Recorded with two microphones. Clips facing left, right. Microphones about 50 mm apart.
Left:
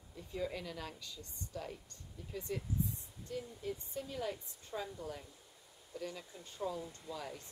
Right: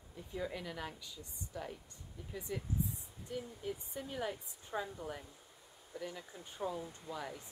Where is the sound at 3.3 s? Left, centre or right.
Centre.